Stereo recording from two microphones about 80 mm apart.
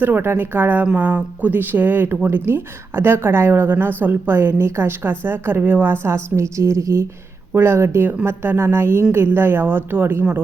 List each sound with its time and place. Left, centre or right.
0.0 s a woman's voice: right